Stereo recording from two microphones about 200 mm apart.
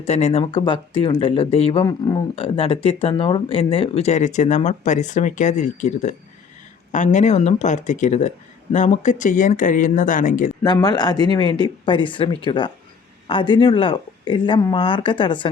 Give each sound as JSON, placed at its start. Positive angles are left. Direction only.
{"t": 0.0, "sound": "speech", "side_deg": 30}
{"t": 10.6, "sound": "speech", "side_deg": 20}